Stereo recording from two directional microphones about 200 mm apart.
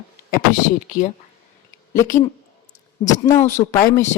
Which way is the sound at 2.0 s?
40° left (ahead or behind).